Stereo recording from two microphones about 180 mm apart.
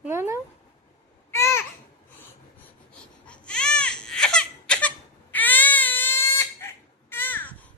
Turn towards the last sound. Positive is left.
turn(degrees=10)  # may be behind; listen again after turning